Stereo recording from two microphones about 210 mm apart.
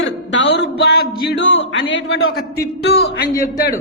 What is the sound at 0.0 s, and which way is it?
A man's voice, 60° left (ahead or behind).